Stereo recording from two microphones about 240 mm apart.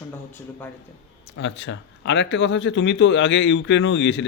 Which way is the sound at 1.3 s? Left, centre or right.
Left.